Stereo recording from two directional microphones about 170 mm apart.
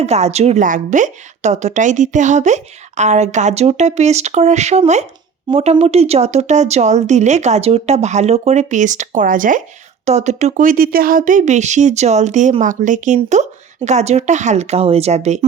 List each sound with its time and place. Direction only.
0.0 s a woman's voice: 40° right (ahead or behind)